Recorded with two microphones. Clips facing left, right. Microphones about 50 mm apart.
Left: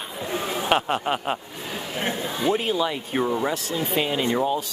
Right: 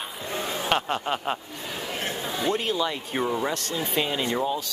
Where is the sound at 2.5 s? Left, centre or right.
Centre.